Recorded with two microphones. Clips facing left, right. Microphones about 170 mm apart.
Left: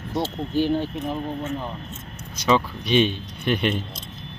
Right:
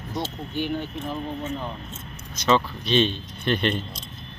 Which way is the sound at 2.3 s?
10° left (ahead or behind).